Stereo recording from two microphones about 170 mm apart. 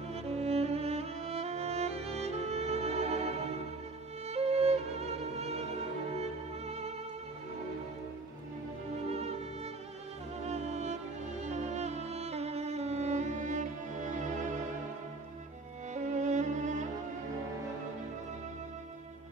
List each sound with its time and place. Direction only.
0.1 s music: 35° right (ahead or behind)
4.3 s violin: 40° right (ahead or behind)
9.1 s music: 40° right (ahead or behind)
10.4 s music: 40° right (ahead or behind)
15.9 s violin: 45° right (ahead or behind)